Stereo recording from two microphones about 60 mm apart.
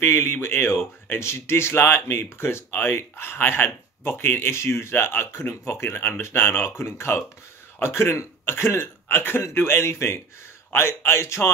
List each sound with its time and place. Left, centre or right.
0.0 s a man's voice: left